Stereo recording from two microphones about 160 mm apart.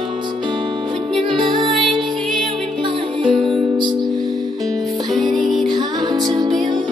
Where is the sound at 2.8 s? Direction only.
30° right (ahead or behind).